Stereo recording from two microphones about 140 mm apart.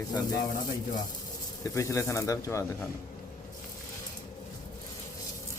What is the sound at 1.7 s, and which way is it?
Speech, 20° left (ahead or behind).